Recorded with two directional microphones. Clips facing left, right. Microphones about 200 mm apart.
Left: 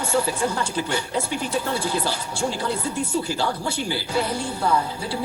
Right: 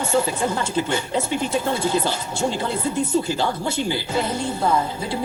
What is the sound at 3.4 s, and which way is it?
Speech, 20° right (ahead or behind).